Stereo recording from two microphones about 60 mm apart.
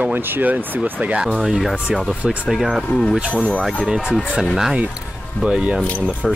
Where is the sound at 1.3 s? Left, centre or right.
Centre.